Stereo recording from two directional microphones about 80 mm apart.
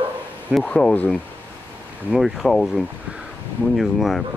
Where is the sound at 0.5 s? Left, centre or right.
Centre.